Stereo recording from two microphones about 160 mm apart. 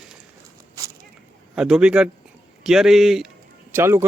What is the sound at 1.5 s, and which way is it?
Speech, 5° right (ahead or behind).